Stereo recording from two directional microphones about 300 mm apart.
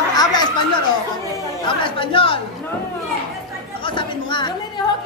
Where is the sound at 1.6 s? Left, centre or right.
Centre.